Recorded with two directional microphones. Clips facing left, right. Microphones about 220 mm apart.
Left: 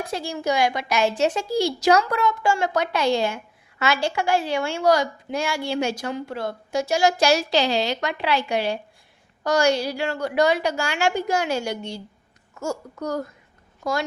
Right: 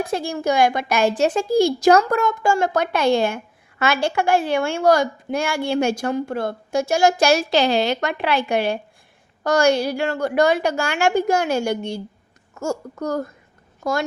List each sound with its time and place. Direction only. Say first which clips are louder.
0.1 s a woman's voice: right 3 dB; 50° right (ahead or behind)